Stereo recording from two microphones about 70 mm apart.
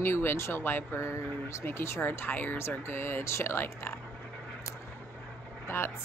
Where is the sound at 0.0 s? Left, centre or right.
Left.